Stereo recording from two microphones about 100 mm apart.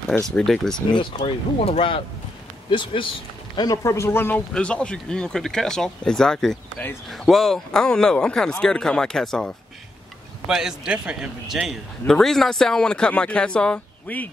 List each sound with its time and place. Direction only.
0.2 s a man's voice: 5° left (ahead or behind)
1.2 s speech: 90° left; by 2.0 s 70° left (ahead or behind)
2.7 s speech: 55° left (ahead or behind)
3.7 s speech: 30° left (ahead or behind)
4.6 s a man's voice: 10° left (ahead or behind)
10.4 s a man's voice: 5° right (ahead or behind); by 14.3 s 15° left (ahead or behind)